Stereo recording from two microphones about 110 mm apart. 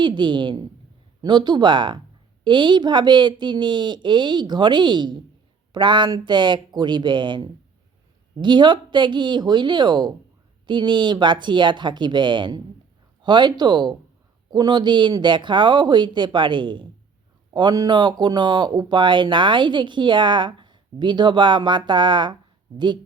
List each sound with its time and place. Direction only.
0.0 s speech: 45° right (ahead or behind)